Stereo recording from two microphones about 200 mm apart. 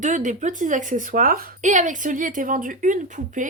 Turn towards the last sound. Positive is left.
turn(degrees=-40)  # may be behind; listen again after turning